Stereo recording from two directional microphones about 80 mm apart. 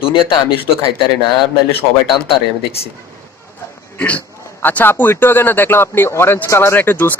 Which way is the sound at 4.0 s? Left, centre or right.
Left.